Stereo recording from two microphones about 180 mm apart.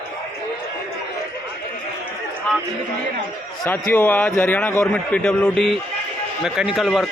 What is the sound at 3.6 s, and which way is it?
A man's voice, 10° left (ahead or behind).